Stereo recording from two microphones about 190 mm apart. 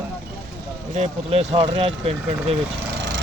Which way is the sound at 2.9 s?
70° right (ahead or behind).